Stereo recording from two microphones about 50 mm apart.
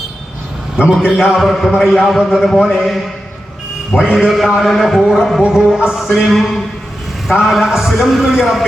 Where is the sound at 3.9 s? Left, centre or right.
Centre.